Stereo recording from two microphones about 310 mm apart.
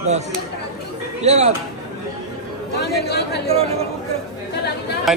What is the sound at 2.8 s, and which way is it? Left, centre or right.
Speech, left.